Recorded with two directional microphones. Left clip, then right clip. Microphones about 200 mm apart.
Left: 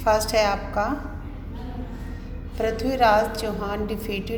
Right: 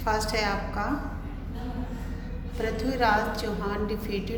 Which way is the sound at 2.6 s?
30° left (ahead or behind).